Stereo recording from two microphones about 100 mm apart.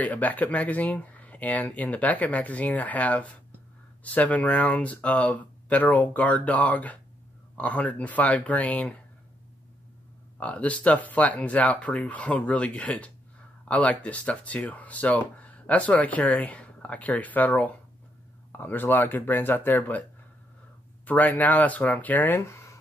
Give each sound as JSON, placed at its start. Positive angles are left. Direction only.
{"t": 0.0, "sound": "speech", "side_deg": 15}
{"t": 10.3, "sound": "speech", "side_deg": 10}